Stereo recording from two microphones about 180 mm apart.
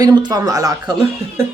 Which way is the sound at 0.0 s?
25° right (ahead or behind).